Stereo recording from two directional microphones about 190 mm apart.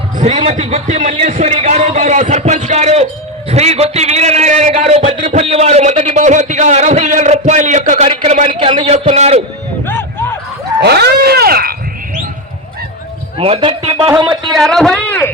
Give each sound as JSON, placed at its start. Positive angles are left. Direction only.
{"t": 0.2, "sound": "a man's voice", "side_deg": -35}
{"t": 5.1, "sound": "speech", "side_deg": -45}
{"t": 5.4, "sound": "a man's voice", "side_deg": -35}
{"t": 9.8, "sound": "a sound", "side_deg": 10}
{"t": 10.8, "sound": "speech", "side_deg": -60}
{"t": 13.4, "sound": "speech", "side_deg": -30}
{"t": 14.5, "sound": "a man's voice", "side_deg": 0}